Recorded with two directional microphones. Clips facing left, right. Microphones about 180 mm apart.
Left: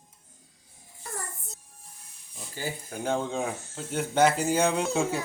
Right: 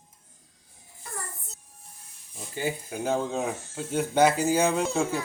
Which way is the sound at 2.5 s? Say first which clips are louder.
Right 5 dB; 20° right (ahead or behind).